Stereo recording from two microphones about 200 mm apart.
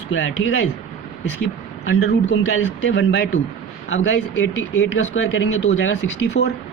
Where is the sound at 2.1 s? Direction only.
70° left (ahead or behind).